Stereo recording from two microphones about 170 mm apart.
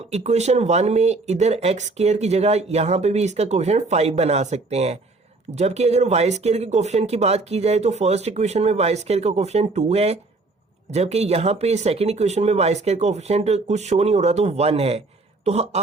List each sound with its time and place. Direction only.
0.1 s speech: 40° right (ahead or behind)